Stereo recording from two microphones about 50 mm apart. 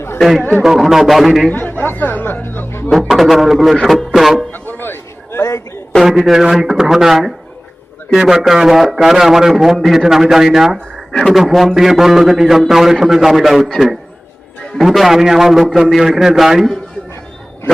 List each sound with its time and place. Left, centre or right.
0.6 s speech: centre
1.5 s speech: left
1.8 s music: left
3.1 s speech: centre
4.5 s a sound: left
5.4 s a sound: left
6.0 s a man's voice: centre
14.8 s a man's voice: centre